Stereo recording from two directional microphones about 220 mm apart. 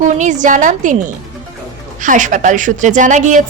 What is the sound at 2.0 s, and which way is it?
A woman's voice, 35° right (ahead or behind).